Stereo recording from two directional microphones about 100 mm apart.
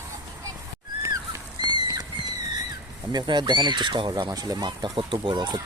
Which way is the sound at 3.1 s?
50° right (ahead or behind).